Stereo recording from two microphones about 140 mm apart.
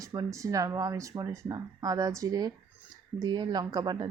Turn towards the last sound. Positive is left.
turn(degrees=-30)  # may be behind; listen again after turning